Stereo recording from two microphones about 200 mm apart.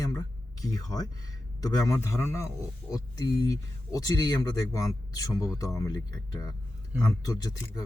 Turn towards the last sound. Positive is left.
turn(degrees=20)  # may be behind; listen again after turning